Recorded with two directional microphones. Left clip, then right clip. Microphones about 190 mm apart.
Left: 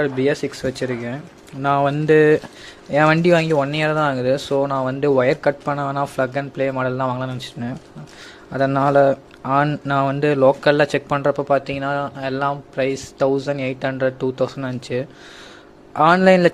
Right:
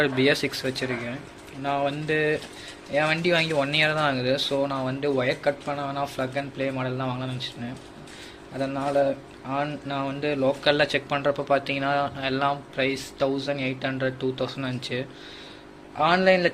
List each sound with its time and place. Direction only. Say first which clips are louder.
0.0 s speech: left 2 dB; 25° left (ahead or behind)
16.0 s speech: left 7 dB; 45° left (ahead or behind)